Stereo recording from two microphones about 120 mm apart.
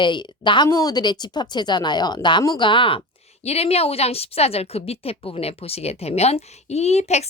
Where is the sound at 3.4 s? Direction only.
60° left (ahead or behind).